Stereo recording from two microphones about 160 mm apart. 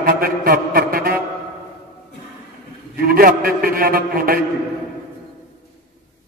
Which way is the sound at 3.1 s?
65° right (ahead or behind).